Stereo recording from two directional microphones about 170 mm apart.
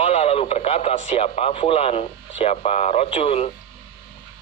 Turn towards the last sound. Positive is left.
turn(degrees=35)  # may be behind; listen again after turning